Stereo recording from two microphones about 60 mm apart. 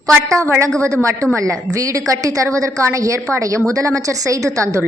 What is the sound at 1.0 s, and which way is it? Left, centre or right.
A woman's voice, right.